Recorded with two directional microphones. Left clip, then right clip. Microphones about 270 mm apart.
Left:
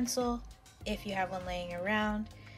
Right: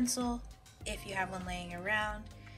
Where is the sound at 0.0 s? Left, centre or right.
Centre.